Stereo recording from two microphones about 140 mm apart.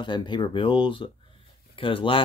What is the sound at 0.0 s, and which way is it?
Speech, 35° left (ahead or behind).